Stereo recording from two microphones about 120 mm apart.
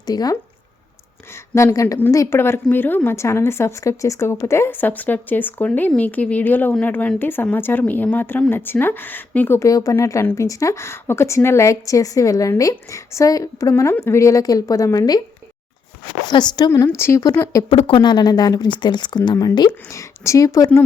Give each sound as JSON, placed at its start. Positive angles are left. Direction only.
{"t": 0.0, "sound": "speech", "side_deg": 30}
{"t": 1.5, "sound": "speech", "side_deg": 25}
{"t": 16.2, "sound": "speech", "side_deg": 35}
{"t": 17.0, "sound": "speech", "side_deg": 25}
{"t": 17.7, "sound": "speech", "side_deg": 45}